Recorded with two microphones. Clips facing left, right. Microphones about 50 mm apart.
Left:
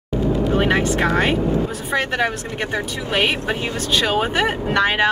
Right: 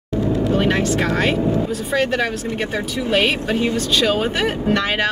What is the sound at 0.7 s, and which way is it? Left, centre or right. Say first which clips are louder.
Speech: left 1 dB; centre.